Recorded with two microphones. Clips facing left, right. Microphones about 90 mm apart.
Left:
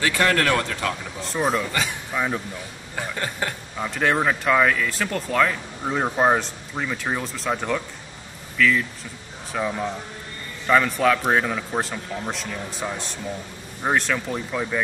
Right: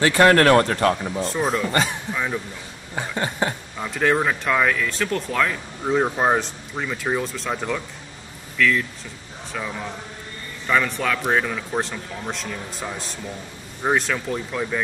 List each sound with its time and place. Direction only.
0.0 s speech: 35° right (ahead or behind)
1.2 s speech: centre (ahead or behind)
2.1 s speech: 15° left (ahead or behind)
3.0 s speech: 20° right (ahead or behind)
3.7 s speech: 5° left (ahead or behind)